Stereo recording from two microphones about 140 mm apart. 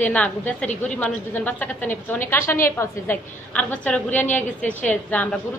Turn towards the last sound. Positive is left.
turn(degrees=10)  # may be behind; listen again after turning